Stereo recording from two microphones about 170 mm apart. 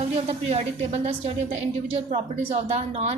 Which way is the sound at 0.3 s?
40° right (ahead or behind).